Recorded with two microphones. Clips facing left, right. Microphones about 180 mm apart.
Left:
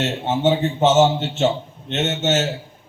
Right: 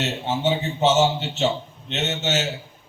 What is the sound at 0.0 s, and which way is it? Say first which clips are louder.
A man's voice: left 4 dB; 50° left (ahead or behind).